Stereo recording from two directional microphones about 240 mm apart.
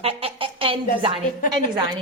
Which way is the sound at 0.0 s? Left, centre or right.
Right.